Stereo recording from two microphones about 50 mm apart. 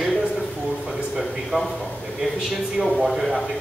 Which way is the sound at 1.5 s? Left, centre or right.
Centre.